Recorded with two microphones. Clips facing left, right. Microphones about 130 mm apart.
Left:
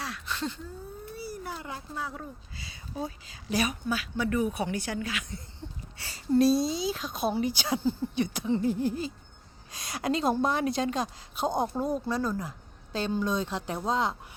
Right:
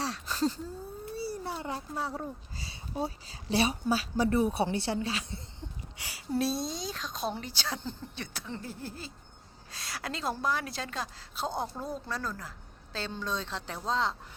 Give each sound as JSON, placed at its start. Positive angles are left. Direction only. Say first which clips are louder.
{"t": 0.0, "sound": "a sound", "louder": "right 4 dB", "side_deg": -35}
{"t": 1.1, "sound": "a child's voice", "louder": "right 3 dB", "side_deg": -30}
{"t": 5.5, "sound": "a woman's voice", "louder": "left 1 dB", "side_deg": -15}